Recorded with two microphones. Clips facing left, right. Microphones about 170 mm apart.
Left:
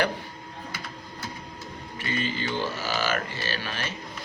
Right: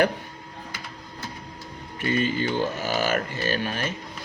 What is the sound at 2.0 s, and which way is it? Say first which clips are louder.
Speech: right 6 dB; 45° right (ahead or behind).